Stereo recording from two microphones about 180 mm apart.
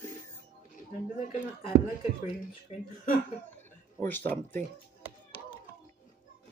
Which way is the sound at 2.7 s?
35° left (ahead or behind).